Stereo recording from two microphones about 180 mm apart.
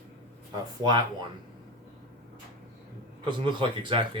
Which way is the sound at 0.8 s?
25° right (ahead or behind).